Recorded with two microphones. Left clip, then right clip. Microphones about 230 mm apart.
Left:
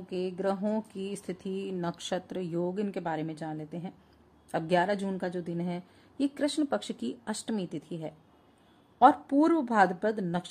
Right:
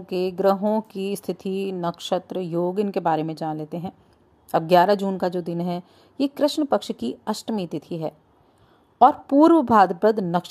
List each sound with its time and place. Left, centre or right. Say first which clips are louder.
0.1 s speech: right 11 dB; right